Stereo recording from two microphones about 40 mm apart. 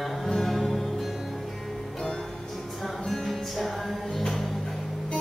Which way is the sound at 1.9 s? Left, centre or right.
Centre.